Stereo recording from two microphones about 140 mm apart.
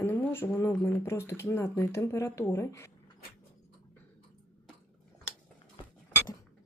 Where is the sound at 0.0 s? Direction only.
15° left (ahead or behind).